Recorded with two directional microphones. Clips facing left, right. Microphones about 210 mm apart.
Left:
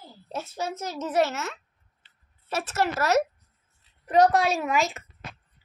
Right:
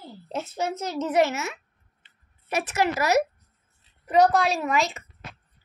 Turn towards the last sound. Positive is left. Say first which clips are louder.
# even
turn(degrees=0)  # may be behind; listen again after turning